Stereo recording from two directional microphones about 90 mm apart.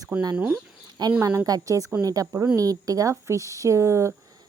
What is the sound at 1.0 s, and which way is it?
Speech, 50° right (ahead or behind).